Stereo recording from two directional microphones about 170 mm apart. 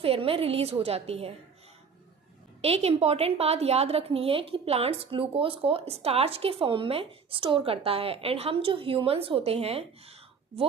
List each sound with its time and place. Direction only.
0.0 s a woman's voice: 35° right (ahead or behind)
2.6 s a woman's voice: 40° right (ahead or behind)